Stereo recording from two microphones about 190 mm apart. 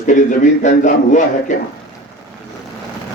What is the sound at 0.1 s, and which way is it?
A man's voice, 40° left (ahead or behind).